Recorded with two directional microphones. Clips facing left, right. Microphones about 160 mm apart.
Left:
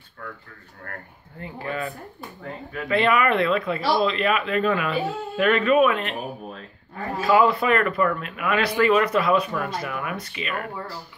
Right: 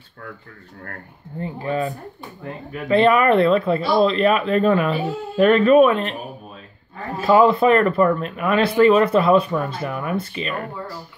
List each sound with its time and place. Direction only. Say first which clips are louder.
1.4 s speech: right 6 dB; 30° right (ahead or behind)
7.2 s speech: right 4 dB; 30° right (ahead or behind)